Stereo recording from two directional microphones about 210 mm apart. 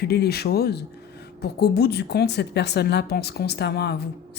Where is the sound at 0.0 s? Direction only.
50° left (ahead or behind).